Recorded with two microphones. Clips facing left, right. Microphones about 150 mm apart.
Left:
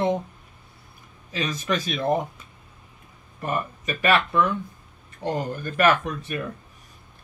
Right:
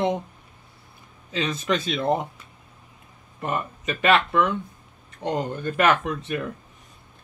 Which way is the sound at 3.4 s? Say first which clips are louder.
Even; 25° right (ahead or behind).